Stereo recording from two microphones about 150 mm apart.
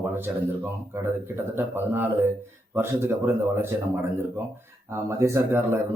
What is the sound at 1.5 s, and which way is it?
Speech, 15° right (ahead or behind).